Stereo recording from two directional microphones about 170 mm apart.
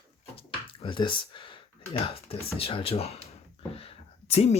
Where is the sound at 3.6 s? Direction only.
35° left (ahead or behind).